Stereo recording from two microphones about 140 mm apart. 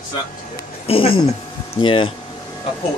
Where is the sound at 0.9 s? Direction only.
40° left (ahead or behind).